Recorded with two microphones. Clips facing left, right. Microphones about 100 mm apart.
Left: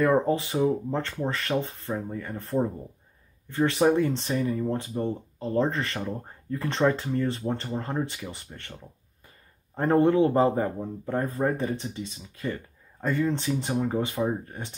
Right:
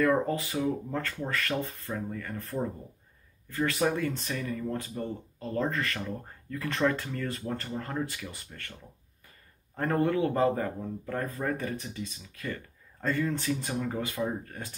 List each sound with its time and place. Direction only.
0.0 s speech: 20° left (ahead or behind)
9.8 s speech: 25° left (ahead or behind)